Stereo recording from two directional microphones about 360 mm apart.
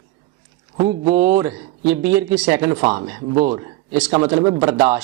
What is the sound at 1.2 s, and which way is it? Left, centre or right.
Speech, centre.